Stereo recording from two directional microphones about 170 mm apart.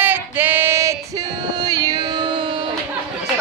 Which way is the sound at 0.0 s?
10° right (ahead or behind).